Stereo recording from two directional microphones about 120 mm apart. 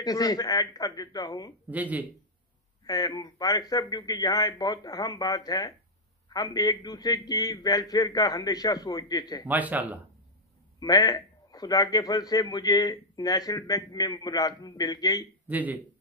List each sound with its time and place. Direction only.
0.0 s a man's voice: 30° left (ahead or behind)
1.7 s speech: 15° right (ahead or behind)
2.8 s a man's voice: 35° left (ahead or behind)
9.5 s speech: 15° right (ahead or behind)
10.8 s a man's voice: 35° left (ahead or behind)
15.4 s speech: 15° right (ahead or behind)